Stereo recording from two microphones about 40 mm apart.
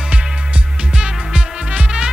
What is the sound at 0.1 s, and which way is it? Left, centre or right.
Music, right.